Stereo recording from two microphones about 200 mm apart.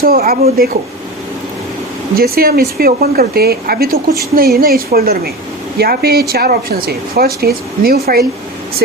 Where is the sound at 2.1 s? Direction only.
50° right (ahead or behind).